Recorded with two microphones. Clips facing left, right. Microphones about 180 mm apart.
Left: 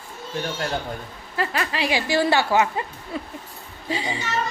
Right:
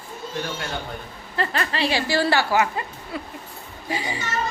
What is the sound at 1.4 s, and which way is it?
A woman's voice, 10° left (ahead or behind).